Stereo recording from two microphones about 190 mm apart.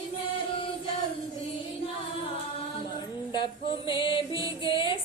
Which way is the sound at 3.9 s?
25° left (ahead or behind).